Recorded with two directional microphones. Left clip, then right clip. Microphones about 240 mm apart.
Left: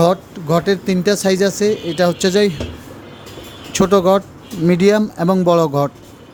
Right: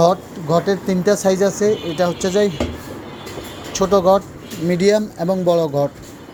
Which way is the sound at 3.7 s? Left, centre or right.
Left.